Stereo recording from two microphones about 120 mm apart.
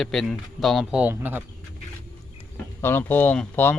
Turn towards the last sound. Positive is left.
turn(degrees=10)  # may be behind; listen again after turning